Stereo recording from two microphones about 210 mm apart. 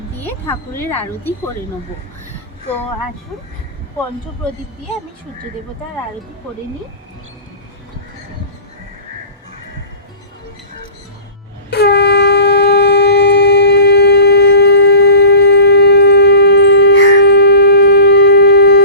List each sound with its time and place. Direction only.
0.2 s speech: 10° left (ahead or behind)
11.7 s shofar: 50° left (ahead or behind)